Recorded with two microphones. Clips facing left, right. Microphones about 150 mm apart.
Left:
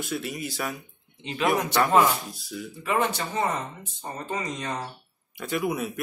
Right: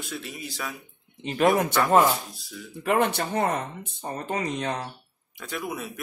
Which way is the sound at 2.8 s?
60° right (ahead or behind).